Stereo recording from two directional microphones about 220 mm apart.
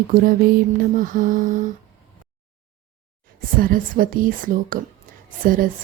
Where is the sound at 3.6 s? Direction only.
40° right (ahead or behind).